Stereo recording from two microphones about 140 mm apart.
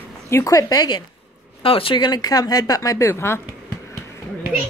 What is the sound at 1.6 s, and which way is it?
Speech, 40° left (ahead or behind).